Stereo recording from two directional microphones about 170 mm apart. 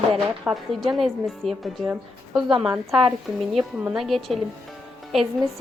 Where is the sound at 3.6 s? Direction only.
5° right (ahead or behind).